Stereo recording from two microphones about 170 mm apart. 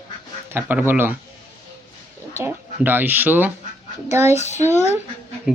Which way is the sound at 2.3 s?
15° right (ahead or behind).